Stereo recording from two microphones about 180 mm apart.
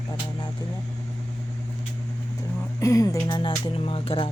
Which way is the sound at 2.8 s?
15° left (ahead or behind).